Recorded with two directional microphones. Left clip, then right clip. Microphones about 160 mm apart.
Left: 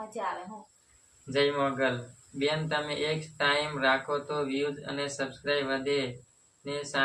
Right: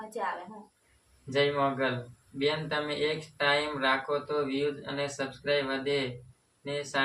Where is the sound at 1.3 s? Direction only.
10° left (ahead or behind).